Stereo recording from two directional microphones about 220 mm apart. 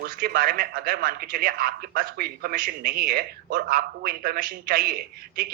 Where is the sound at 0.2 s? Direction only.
45° right (ahead or behind).